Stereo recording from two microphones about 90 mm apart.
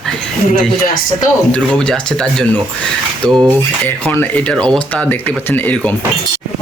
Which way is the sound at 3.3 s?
50° right (ahead or behind).